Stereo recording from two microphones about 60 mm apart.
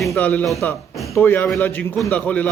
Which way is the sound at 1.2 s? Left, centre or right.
Left.